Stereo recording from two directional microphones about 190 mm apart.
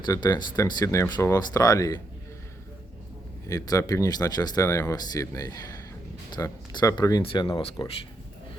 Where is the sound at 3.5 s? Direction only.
15° left (ahead or behind).